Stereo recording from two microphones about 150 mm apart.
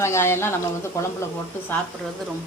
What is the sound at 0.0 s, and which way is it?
Speech, 15° left (ahead or behind).